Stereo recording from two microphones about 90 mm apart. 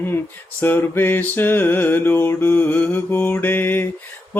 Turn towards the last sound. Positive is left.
turn(degrees=20)  # may be behind; listen again after turning